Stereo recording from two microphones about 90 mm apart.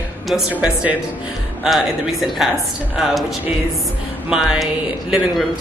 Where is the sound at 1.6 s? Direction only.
5° right (ahead or behind).